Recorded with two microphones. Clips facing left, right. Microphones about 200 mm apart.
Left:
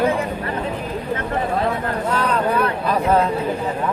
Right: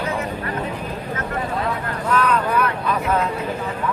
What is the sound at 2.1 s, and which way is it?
Vehicle, 30° left (ahead or behind).